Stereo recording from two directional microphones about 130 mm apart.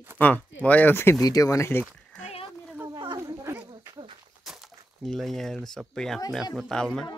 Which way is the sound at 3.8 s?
30° right (ahead or behind).